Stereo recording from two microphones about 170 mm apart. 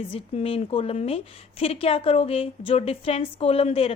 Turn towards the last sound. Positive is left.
turn(degrees=35)  # may be behind; listen again after turning